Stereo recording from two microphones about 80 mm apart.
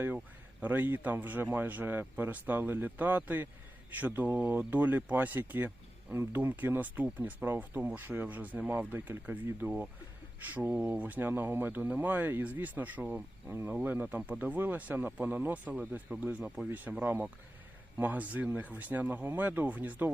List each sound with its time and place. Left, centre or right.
0.6 s speech: right